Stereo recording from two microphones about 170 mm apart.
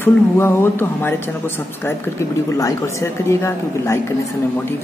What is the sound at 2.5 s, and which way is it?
A woman's voice, 20° left (ahead or behind).